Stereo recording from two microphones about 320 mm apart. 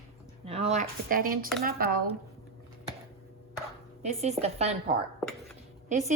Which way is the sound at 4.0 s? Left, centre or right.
Right.